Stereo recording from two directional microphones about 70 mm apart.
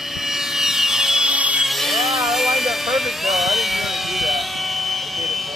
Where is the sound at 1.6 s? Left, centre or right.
Centre.